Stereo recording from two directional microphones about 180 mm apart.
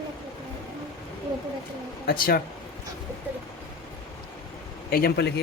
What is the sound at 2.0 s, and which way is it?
Speech, 55° left (ahead or behind).